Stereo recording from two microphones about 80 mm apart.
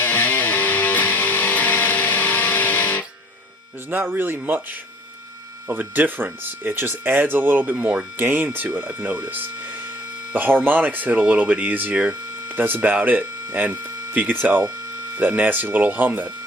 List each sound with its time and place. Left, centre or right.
0.0 s music: left
3.8 s speech: right
5.6 s speech: right
10.3 s speech: right